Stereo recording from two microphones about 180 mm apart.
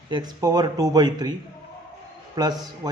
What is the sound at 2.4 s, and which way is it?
Speech, 20° right (ahead or behind).